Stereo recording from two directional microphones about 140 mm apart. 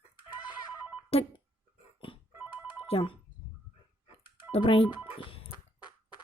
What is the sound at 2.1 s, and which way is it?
Telephone bell ringing, 40° left (ahead or behind).